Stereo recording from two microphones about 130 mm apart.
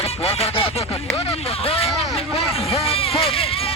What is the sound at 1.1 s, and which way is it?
Speech, 50° left (ahead or behind).